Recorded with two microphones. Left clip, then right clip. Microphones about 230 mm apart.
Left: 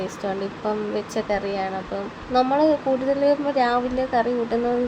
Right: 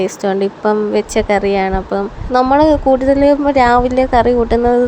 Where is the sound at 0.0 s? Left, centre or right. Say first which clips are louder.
Right 11 dB; right.